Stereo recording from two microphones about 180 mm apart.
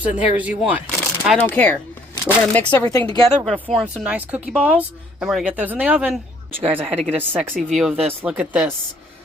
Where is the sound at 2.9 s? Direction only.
20° left (ahead or behind).